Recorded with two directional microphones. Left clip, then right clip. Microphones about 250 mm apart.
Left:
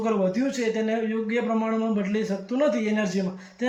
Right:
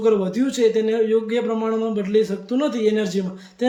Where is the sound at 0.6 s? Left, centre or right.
Centre.